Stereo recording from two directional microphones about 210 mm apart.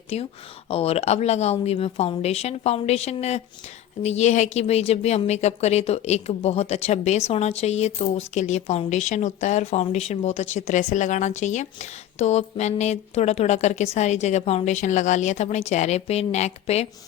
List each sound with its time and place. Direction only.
0.1 s speech: 30° left (ahead or behind)